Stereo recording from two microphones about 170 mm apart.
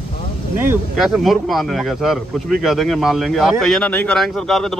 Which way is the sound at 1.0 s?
Centre (ahead or behind).